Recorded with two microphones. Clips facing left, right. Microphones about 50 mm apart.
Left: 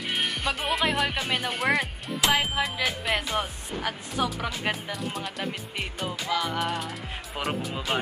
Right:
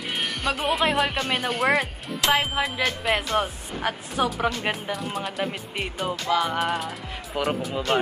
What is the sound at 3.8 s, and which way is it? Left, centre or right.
Speech, centre.